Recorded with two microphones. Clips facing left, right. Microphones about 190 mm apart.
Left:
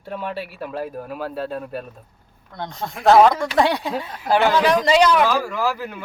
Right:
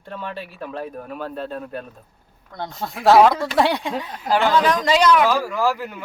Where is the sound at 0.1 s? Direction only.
10° left (ahead or behind).